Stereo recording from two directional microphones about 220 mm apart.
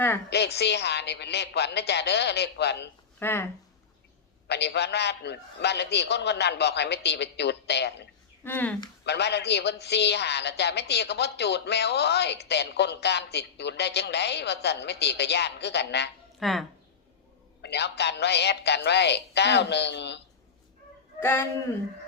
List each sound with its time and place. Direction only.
0.3 s a woman's voice: 50° left (ahead or behind)
3.2 s speech: 10° left (ahead or behind)
4.4 s a woman's voice: 50° left (ahead or behind)
8.4 s speech: 10° left (ahead or behind)
9.0 s a woman's voice: 50° left (ahead or behind)
16.4 s speech: centre (ahead or behind)
17.6 s a woman's voice: 50° left (ahead or behind)
21.2 s speech: 10° left (ahead or behind)